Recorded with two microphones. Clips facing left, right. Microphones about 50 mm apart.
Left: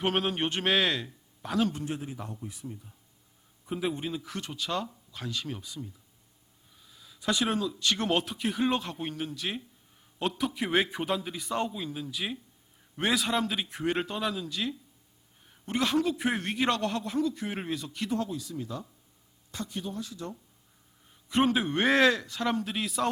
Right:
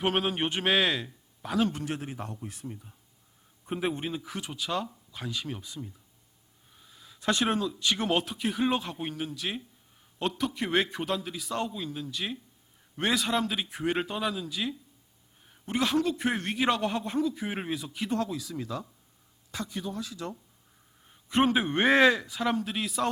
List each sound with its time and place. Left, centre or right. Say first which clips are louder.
0.0 s speech: right 1 dB; centre
2.0 s a man's voice: right 1 dB; right
2.6 s a man's voice: right 1 dB; centre
3.7 s a man's voice: right 1 dB; right
4.2 s a man's voice: even; centre
5.6 s a man's voice: even; right
7.2 s speech: right 1 dB; right
7.4 s a man's voice: right 1 dB; centre
20.2 s speech: right 3 dB; right
21.4 s a man's voice: right 1 dB; right
21.8 s speech: right 2 dB; centre